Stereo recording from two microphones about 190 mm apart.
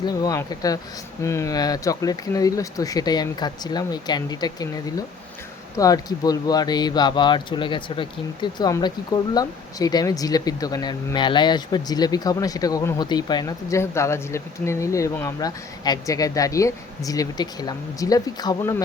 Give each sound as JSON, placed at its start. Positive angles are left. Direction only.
{"t": 0.0, "sound": "speech", "side_deg": 20}